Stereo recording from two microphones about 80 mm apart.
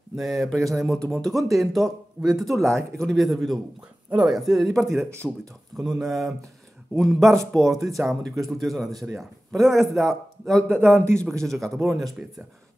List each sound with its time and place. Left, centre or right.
0.1 s speech: centre
4.9 s speech: right
5.8 s speech: centre